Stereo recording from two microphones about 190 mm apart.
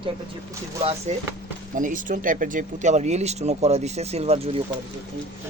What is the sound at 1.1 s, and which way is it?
Speech, 35° right (ahead or behind).